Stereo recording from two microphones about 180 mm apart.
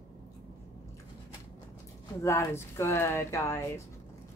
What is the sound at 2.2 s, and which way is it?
Speech, 15° left (ahead or behind).